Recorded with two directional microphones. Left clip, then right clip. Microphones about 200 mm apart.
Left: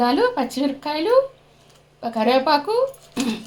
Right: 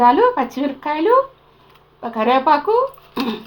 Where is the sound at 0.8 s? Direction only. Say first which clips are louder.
Right 8 dB; 30° left (ahead or behind).